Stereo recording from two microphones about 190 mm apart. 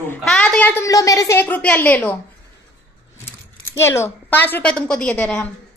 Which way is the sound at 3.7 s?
15° left (ahead or behind).